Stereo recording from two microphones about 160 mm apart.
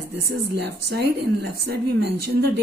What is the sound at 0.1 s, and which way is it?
A woman's voice, 90° right.